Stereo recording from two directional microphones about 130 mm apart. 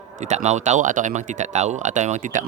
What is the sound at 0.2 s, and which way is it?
Speech, 60° right (ahead or behind).